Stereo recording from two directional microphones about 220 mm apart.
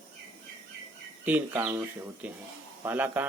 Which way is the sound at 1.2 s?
10° right (ahead or behind).